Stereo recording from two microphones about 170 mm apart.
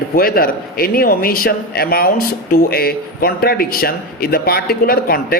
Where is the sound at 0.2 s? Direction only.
60° left (ahead or behind).